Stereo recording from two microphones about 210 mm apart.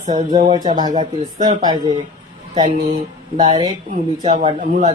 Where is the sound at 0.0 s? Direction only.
30° right (ahead or behind).